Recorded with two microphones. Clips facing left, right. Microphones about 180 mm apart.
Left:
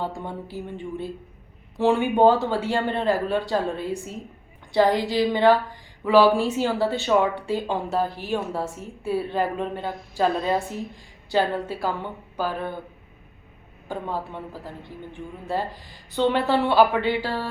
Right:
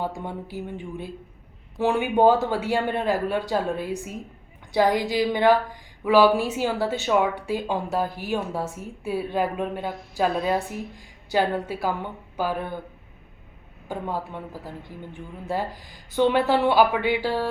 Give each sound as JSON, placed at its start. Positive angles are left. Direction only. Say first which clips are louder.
{"t": 0.0, "sound": "speech", "louder": "even", "side_deg": -15}
{"t": 13.8, "sound": "speech", "louder": "even", "side_deg": -10}
{"t": 16.1, "sound": "speech", "louder": "right 1 dB", "side_deg": -10}